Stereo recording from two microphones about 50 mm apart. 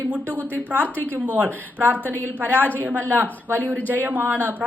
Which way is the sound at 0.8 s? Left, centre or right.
Left.